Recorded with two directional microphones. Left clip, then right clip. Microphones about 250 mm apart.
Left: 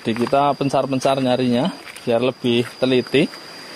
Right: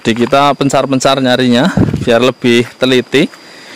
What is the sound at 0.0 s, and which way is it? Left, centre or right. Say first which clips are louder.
Speech: right 8 dB; right.